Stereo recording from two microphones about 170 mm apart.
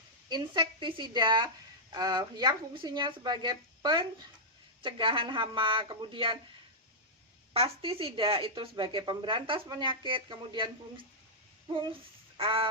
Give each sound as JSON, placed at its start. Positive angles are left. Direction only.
{"t": 0.3, "sound": "speech", "side_deg": -25}
{"t": 7.5, "sound": "speech", "side_deg": -35}
{"t": 12.4, "sound": "goose", "side_deg": -30}